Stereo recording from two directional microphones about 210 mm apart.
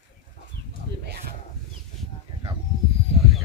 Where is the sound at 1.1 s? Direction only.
50° right (ahead or behind).